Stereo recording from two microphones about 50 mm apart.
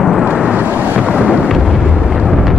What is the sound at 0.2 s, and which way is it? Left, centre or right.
Vehicle, centre.